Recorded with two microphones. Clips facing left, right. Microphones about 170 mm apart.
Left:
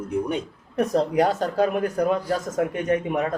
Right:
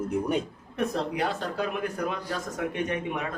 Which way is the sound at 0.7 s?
40° left (ahead or behind).